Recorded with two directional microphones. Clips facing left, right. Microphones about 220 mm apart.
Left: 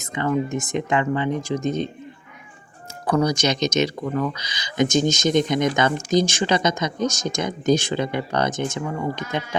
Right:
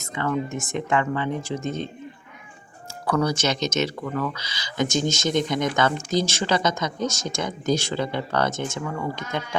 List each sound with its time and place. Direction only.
0.0 s speech: 20° left (ahead or behind)
3.1 s speech: 15° left (ahead or behind)